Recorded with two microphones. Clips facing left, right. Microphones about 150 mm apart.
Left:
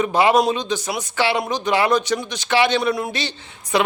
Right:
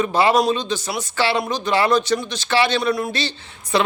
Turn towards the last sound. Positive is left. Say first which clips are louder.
# even
turn(degrees=15)  # may be behind; listen again after turning